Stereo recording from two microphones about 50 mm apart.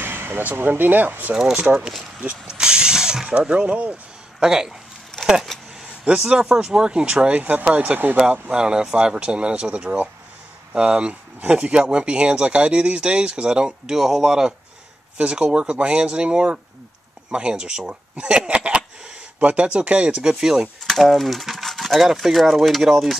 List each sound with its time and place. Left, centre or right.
0.0 s a sound: right
0.4 s speech: right
1.3 s speech: centre
2.4 s ratchet: centre
3.3 s speech: right
4.4 s speech: centre
5.1 s a sound: centre
6.0 s speech: right
8.3 s speech: centre
20.9 s speech: centre